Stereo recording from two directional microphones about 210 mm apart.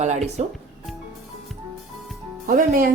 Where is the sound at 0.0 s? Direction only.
35° right (ahead or behind).